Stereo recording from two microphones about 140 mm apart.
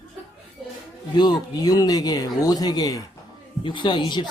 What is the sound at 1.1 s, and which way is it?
Speech, 30° left (ahead or behind).